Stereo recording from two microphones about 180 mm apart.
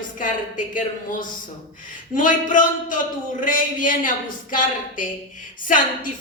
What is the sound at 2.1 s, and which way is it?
Speech, 45° left (ahead or behind).